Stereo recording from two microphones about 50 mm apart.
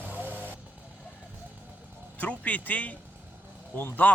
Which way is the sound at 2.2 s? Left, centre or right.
Left.